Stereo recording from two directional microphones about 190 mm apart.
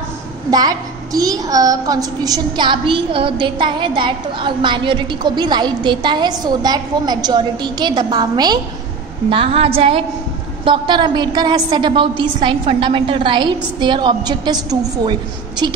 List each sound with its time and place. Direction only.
0.5 s a woman's voice: 20° right (ahead or behind)